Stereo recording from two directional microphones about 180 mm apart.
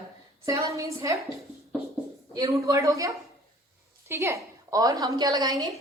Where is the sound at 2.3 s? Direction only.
15° right (ahead or behind).